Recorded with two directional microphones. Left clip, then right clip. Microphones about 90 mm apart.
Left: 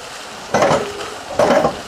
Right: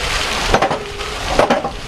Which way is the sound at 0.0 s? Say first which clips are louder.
Right 12 dB; 20° left (ahead or behind).